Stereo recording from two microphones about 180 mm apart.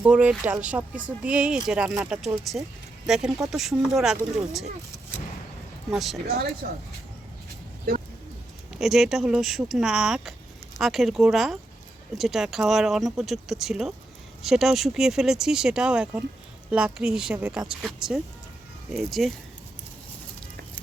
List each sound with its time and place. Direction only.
0.0 s speech: 5° right (ahead or behind)
5.9 s speech: centre (ahead or behind)
6.6 s speech: 60° right (ahead or behind)
8.7 s speech: centre (ahead or behind)